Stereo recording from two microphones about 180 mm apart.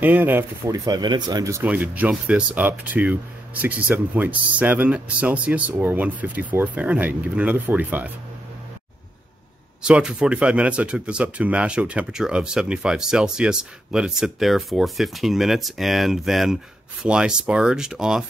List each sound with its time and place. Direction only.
0.0 s speech: 10° right (ahead or behind)
1.6 s speech: 10° right (ahead or behind)
9.8 s speech: 5° right (ahead or behind)